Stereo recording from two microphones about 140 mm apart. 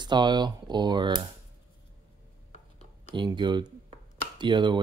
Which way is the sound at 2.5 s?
50° left (ahead or behind).